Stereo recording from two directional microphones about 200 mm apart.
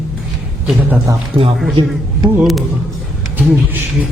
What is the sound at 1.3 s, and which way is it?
Speech, 25° right (ahead or behind).